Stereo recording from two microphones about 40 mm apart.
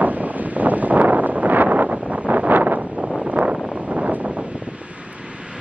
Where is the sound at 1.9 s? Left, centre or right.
Right.